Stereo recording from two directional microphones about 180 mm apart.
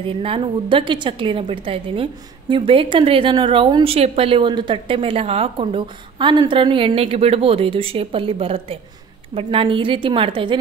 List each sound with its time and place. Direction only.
0.0 s a woman's voice: 30° right (ahead or behind)